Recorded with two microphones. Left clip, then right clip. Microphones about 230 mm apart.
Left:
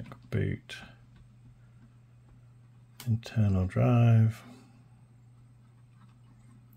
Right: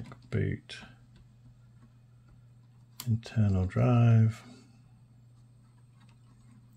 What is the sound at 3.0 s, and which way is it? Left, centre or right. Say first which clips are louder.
Speech: even; centre.